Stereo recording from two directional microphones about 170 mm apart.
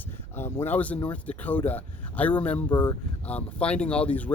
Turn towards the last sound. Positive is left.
turn(degrees=10)  # may be behind; listen again after turning